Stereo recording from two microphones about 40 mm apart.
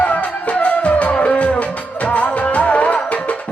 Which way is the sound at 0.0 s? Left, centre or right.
Left.